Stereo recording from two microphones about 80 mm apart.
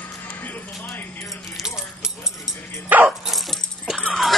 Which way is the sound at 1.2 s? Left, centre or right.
Centre.